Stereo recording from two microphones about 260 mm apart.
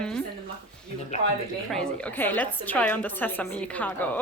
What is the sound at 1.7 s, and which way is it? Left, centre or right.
A woman's voice, centre.